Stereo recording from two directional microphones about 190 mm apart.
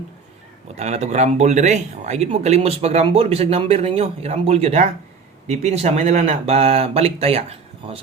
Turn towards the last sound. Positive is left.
turn(degrees=-30)  # may be behind; listen again after turning